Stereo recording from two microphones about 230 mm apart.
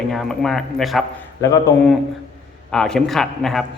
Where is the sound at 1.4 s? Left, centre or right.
Centre.